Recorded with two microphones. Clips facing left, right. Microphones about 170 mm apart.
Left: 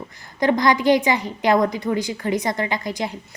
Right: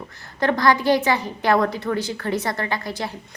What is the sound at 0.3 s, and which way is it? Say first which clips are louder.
A woman's voice: left 1 dB; 15° left (ahead or behind).